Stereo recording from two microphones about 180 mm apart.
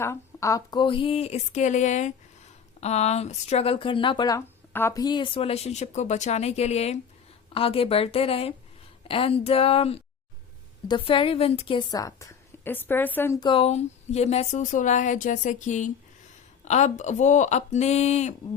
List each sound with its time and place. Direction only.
0.0 s a woman's voice: 15° left (ahead or behind)
13.4 s speech: 30° left (ahead or behind)